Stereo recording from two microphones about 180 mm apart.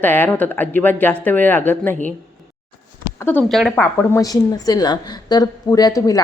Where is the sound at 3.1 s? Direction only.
10° left (ahead or behind).